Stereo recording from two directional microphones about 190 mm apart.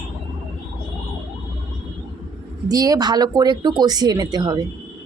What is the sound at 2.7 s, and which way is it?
Speech, 20° right (ahead or behind).